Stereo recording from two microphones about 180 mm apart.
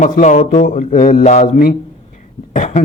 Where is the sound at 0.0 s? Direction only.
45° left (ahead or behind).